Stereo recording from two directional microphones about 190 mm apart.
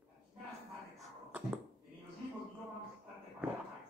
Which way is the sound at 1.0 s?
5° right (ahead or behind).